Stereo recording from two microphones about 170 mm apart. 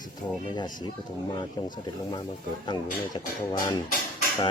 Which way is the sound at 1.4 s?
25° left (ahead or behind).